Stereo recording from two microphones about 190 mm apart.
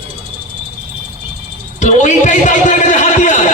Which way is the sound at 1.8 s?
40° left (ahead or behind).